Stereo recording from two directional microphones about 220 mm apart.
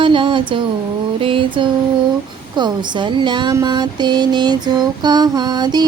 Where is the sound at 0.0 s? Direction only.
20° right (ahead or behind).